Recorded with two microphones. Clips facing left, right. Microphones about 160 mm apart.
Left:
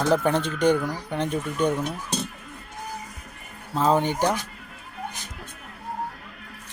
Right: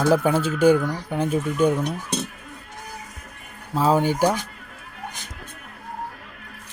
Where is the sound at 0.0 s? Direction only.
5° right (ahead or behind).